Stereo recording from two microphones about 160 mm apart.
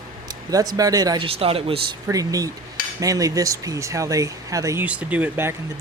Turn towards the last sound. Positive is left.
turn(degrees=-10)  # may be behind; listen again after turning